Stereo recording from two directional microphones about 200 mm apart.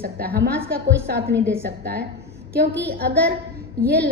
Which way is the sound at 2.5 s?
50° right (ahead or behind).